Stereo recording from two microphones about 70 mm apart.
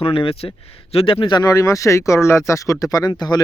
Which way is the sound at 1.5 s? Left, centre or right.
Left.